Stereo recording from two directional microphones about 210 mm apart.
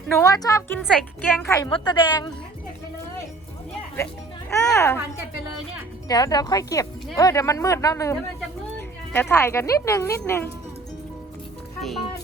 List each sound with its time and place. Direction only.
0.2 s speech: 15° left (ahead or behind)
0.8 s a child's voice: 5° left (ahead or behind)
1.5 s a woman's voice: 15° left (ahead or behind)
3.9 s music: 10° left (ahead or behind)
4.7 s speech: 15° left (ahead or behind)
6.1 s speech: 20° left (ahead or behind)
9.1 s speech: 10° left (ahead or behind)
11.8 s a child's voice: centre (ahead or behind)